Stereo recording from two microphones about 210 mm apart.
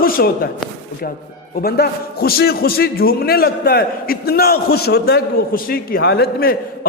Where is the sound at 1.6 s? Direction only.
50° left (ahead or behind).